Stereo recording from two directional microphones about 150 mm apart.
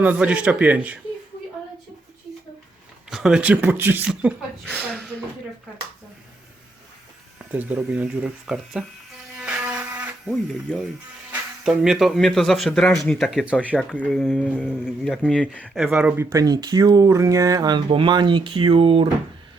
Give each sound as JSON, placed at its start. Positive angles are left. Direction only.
{"t": 0.0, "sound": "speech", "side_deg": -10}
{"t": 3.1, "sound": "speech", "side_deg": -5}
{"t": 4.6, "sound": "speech", "side_deg": 5}
{"t": 7.3, "sound": "speech", "side_deg": -10}
{"t": 9.4, "sound": "a sound", "side_deg": -10}
{"t": 10.2, "sound": "speech", "side_deg": 0}
{"t": 13.7, "sound": "speech", "side_deg": 5}
{"t": 16.3, "sound": "speech", "side_deg": -25}